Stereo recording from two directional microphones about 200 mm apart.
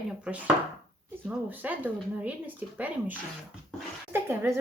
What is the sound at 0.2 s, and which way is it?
A woman's voice, 5° right (ahead or behind).